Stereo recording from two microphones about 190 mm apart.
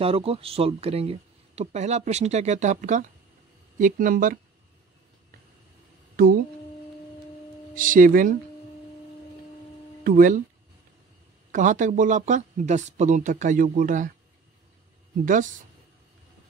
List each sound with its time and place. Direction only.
0.0 s speech: 30° right (ahead or behind)
6.2 s a sound: 50° right (ahead or behind)
7.7 s speech: 45° right (ahead or behind)
10.0 s speech: 45° right (ahead or behind)
11.5 s speech: 40° right (ahead or behind)
15.2 s speech: 40° right (ahead or behind)